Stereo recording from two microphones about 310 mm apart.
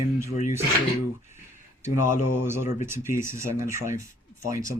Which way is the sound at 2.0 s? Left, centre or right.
Left.